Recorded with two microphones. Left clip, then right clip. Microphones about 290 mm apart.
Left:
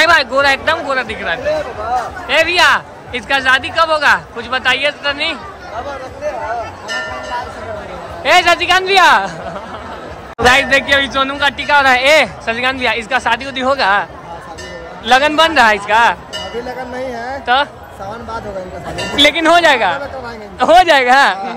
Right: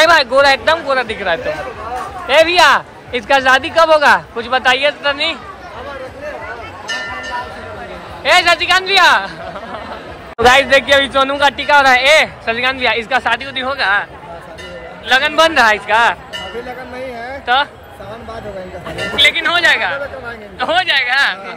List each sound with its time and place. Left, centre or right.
0.0 s speech: centre
8.2 s a man's voice: centre
10.4 s a man's voice: centre
15.0 s a man's voice: centre
17.1 s a sound: centre
19.1 s a man's voice: centre